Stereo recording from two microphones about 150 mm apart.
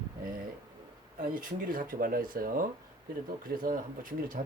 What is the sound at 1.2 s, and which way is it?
Speech, 65° right (ahead or behind).